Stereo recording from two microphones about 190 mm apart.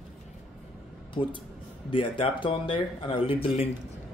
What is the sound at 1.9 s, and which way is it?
Speech, 25° left (ahead or behind).